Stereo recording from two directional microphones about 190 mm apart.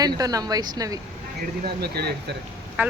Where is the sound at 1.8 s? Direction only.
60° right (ahead or behind).